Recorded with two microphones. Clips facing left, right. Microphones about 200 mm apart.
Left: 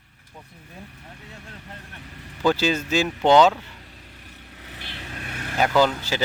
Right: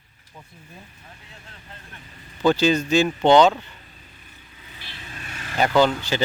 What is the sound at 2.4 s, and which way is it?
Speech, 5° left (ahead or behind).